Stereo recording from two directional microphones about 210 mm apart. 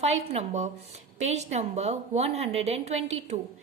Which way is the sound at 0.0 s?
30° right (ahead or behind).